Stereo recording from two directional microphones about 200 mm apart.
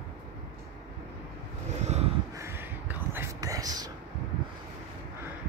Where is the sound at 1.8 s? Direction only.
35° right (ahead or behind).